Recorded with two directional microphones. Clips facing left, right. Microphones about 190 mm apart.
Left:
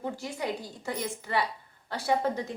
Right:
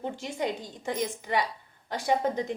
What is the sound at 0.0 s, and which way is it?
A woman's voice, 20° right (ahead or behind).